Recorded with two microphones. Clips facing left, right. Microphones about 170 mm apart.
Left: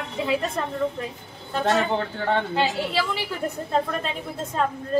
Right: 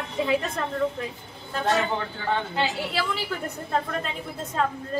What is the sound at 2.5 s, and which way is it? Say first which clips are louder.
Speech: left 3 dB; centre (ahead or behind).